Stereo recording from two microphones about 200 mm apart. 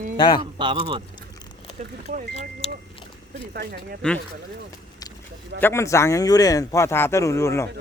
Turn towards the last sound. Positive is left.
turn(degrees=15)  # may be behind; listen again after turning